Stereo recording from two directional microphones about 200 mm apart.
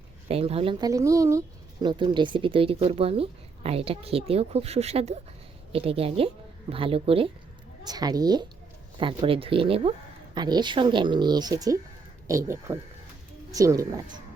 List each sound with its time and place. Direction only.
0.3 s speech: 30° right (ahead or behind)